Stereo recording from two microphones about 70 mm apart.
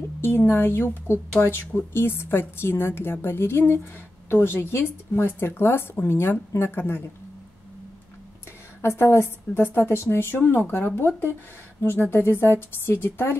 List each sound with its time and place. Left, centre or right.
0.2 s a woman's voice: left
8.8 s a woman's voice: left